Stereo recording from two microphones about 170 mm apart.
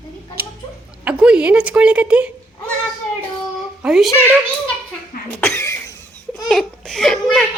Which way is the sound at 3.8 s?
Centre (ahead or behind).